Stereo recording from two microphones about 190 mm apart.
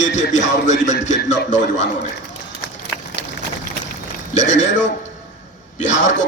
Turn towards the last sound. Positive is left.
turn(degrees=40)  # may be behind; listen again after turning